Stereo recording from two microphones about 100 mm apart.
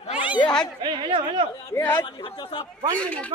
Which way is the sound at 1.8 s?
45° left (ahead or behind).